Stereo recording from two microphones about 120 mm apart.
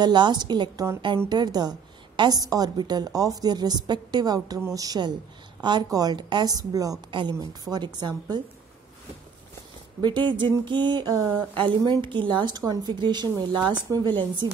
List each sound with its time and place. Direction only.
0.0 s a woman's voice: 40° right (ahead or behind)
10.0 s a woman's voice: 40° right (ahead or behind)